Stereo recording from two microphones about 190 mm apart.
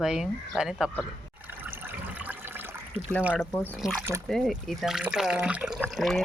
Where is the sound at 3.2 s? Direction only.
5° right (ahead or behind).